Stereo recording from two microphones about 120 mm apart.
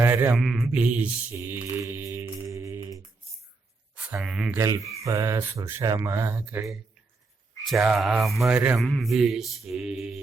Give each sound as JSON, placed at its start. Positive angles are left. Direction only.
{"t": 0.0, "sound": "mantra", "side_deg": -15}
{"t": 0.3, "sound": "mantra", "side_deg": 0}
{"t": 0.7, "sound": "speech", "side_deg": -10}
{"t": 1.4, "sound": "mantra", "side_deg": -20}
{"t": 3.9, "sound": "speech", "side_deg": -10}
{"t": 4.5, "sound": "speech", "side_deg": -25}
{"t": 7.6, "sound": "mantra", "side_deg": 0}